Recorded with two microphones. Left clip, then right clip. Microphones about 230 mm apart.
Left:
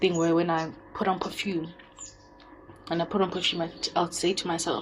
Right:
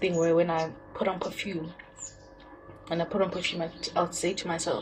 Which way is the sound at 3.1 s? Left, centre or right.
Left.